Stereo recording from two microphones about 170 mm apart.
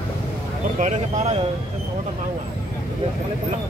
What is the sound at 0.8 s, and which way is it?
Speech, 45° right (ahead or behind).